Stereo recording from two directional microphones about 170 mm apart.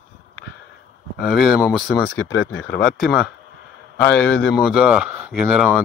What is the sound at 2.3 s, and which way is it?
Speech, 90° left.